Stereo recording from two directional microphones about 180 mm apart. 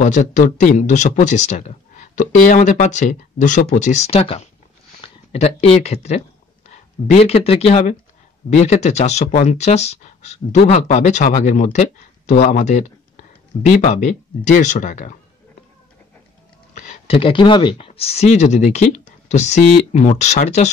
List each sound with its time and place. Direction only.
0.0 s speech: 45° left (ahead or behind)
7.2 s speech: 35° left (ahead or behind)
16.7 s speech: 35° left (ahead or behind)